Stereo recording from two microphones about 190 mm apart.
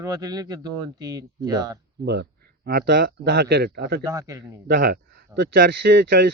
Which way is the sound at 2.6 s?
55° right (ahead or behind).